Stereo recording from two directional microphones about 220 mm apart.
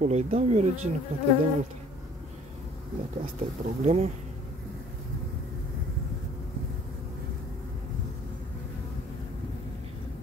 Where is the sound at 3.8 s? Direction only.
30° right (ahead or behind).